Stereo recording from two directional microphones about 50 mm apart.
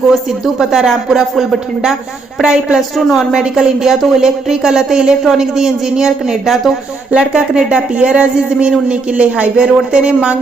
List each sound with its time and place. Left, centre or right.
0.1 s speech: centre
2.9 s speech: centre
3.4 s speech: centre
7.1 s speech: centre